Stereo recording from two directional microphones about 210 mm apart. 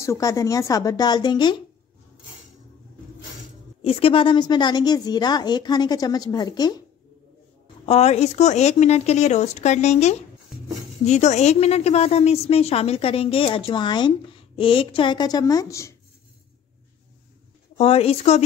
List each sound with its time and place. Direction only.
0.0 s a woman's voice: 15° left (ahead or behind)
3.8 s a woman's voice: 25° left (ahead or behind)
7.8 s a woman's voice: 30° left (ahead or behind)
17.7 s a woman's voice: 25° left (ahead or behind)